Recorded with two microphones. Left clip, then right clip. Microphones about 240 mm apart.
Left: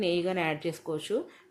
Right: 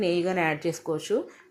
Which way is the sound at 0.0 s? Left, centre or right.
Centre.